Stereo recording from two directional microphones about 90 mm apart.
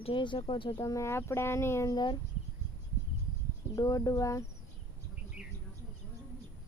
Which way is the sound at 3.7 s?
40° left (ahead or behind).